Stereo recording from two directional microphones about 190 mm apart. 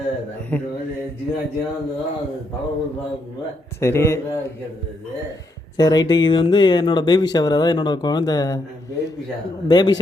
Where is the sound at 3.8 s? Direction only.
15° left (ahead or behind).